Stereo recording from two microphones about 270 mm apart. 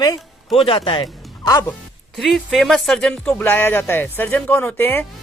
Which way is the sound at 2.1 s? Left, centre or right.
Centre.